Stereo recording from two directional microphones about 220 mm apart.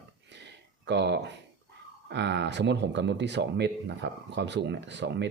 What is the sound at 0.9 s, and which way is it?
Speech, 50° right (ahead or behind).